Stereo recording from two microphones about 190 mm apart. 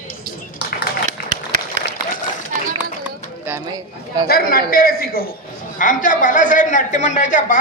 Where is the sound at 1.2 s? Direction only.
50° left (ahead or behind).